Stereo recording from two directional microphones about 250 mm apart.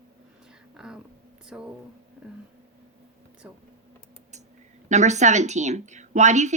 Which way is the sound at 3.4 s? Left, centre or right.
Centre.